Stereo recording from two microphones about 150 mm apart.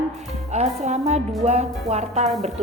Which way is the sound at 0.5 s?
45° right (ahead or behind).